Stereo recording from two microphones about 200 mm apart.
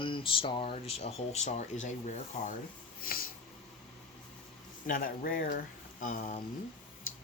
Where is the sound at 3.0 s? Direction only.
45° left (ahead or behind).